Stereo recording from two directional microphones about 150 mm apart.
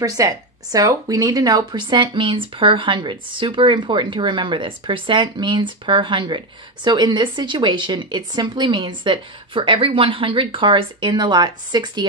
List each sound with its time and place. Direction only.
0.0 s speech: 25° right (ahead or behind)